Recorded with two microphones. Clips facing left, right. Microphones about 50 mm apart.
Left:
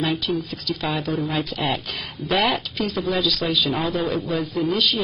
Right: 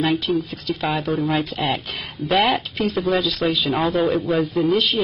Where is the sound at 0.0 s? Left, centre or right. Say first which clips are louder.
Right 3 dB; centre.